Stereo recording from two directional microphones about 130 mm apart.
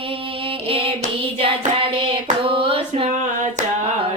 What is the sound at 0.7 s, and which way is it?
Hands, 45° right (ahead or behind).